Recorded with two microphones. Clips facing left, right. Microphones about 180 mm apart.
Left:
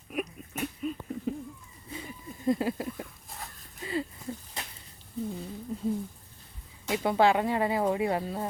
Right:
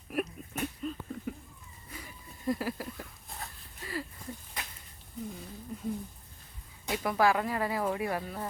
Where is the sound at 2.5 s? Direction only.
25° left (ahead or behind).